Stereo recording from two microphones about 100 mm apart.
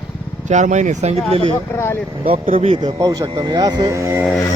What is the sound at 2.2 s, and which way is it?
Speech, 75° right (ahead or behind).